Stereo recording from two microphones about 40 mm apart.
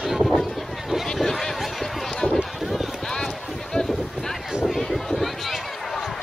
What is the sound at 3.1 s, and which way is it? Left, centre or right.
Boat, centre.